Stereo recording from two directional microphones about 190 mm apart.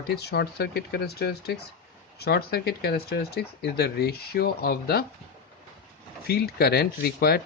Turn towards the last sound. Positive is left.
turn(degrees=55)  # may be behind; listen again after turning